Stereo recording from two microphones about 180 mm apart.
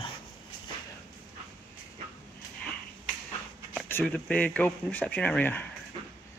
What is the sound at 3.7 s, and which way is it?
Speech, 10° left (ahead or behind).